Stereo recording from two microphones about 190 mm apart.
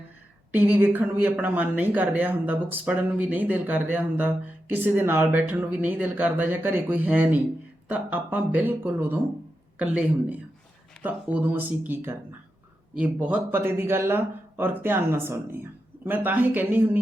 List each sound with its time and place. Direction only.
0.5 s speech: 10° right (ahead or behind)
13.0 s speech: 5° right (ahead or behind)